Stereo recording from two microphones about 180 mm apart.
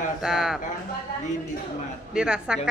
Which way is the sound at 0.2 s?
5° right (ahead or behind).